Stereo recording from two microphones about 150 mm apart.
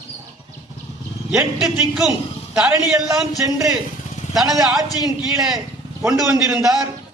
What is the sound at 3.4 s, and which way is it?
Speech, 20° right (ahead or behind).